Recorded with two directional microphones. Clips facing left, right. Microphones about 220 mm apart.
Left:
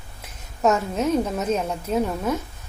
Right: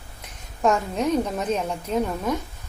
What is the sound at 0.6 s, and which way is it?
Speech, 5° left (ahead or behind).